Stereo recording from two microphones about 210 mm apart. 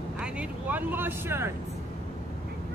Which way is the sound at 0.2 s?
5° right (ahead or behind).